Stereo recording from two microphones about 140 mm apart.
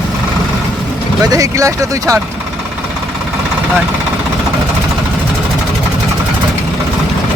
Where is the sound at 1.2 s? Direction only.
25° right (ahead or behind).